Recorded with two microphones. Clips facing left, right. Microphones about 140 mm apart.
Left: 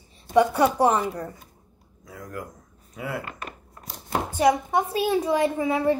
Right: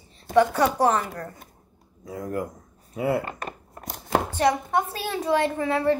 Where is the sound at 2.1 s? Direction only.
30° right (ahead or behind).